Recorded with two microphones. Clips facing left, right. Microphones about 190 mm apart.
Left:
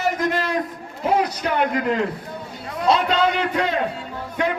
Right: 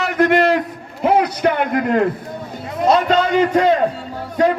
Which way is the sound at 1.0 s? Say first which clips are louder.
Right 6 dB; 60° right (ahead or behind).